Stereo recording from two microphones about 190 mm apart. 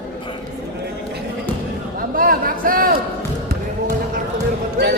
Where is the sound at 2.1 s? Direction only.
50° right (ahead or behind).